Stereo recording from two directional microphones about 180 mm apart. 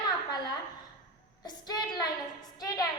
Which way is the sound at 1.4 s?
20° left (ahead or behind).